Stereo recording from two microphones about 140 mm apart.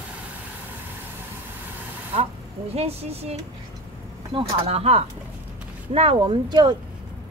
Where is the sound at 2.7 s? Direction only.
50° right (ahead or behind).